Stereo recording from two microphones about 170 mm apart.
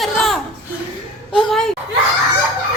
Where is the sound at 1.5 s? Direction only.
Centre (ahead or behind).